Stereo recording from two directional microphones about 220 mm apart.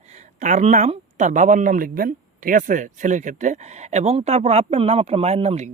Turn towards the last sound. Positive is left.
turn(degrees=-30)  # may be behind; listen again after turning